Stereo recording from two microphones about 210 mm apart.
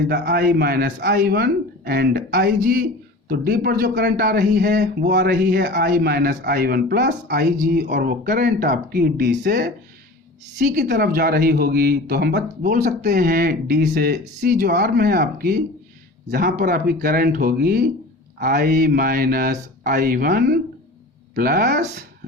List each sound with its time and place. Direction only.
0.1 s speech: 45° right (ahead or behind)
10.8 s speech: 50° right (ahead or behind)